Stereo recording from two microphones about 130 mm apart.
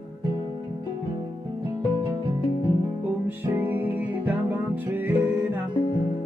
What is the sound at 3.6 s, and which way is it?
Music, 15° right (ahead or behind).